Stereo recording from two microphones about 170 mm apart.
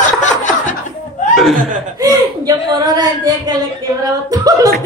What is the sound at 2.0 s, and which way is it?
Speech, 20° right (ahead or behind).